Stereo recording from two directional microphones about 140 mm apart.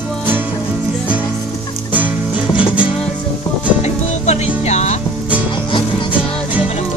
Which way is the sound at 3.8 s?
50° left (ahead or behind).